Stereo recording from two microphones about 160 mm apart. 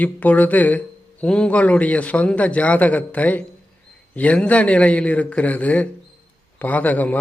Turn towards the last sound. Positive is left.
turn(degrees=10)  # may be behind; listen again after turning